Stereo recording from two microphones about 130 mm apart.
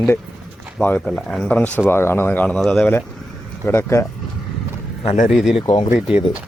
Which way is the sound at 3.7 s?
20° left (ahead or behind).